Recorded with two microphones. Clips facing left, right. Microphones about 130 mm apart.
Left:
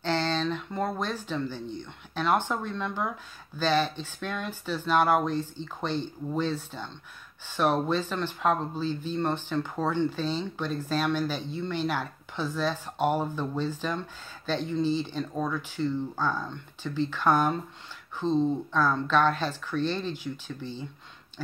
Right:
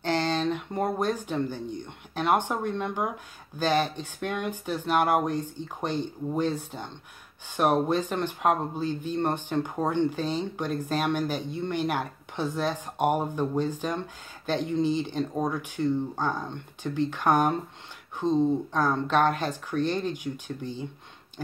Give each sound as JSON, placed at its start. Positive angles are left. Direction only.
{"t": 0.0, "sound": "speech", "side_deg": -15}